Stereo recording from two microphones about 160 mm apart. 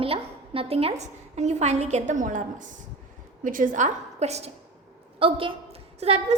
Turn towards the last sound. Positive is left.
turn(degrees=-40)  # may be behind; listen again after turning